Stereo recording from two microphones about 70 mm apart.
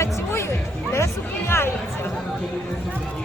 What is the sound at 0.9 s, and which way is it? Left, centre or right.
Speech, left.